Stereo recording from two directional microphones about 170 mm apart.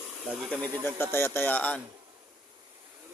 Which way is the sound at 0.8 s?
15° left (ahead or behind).